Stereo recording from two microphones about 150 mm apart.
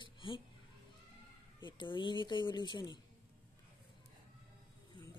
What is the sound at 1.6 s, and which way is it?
Speech, 30° left (ahead or behind).